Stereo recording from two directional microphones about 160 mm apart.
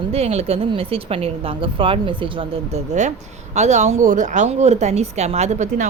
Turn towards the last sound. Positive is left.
turn(degrees=-45)  # may be behind; listen again after turning